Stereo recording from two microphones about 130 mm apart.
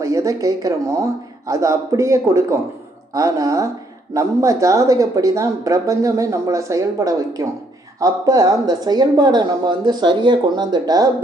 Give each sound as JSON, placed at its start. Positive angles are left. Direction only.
{"t": 0.0, "sound": "a woman's voice", "side_deg": -25}